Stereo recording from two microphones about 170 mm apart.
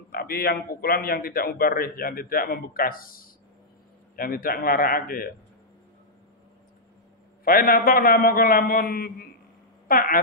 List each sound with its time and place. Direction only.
0.1 s a man's voice: 65° left (ahead or behind)
7.4 s a man's voice: 60° left (ahead or behind)